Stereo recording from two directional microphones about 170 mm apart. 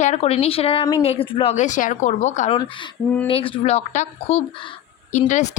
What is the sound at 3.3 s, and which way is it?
A woman's voice, 35° left (ahead or behind).